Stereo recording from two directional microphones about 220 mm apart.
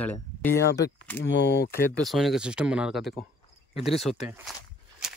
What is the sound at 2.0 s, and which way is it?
Speech, centre (ahead or behind).